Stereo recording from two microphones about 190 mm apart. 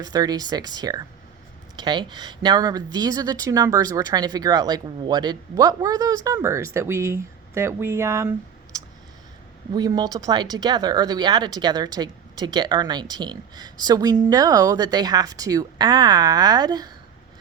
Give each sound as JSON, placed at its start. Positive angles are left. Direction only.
{"t": 0.0, "sound": "speech", "side_deg": -20}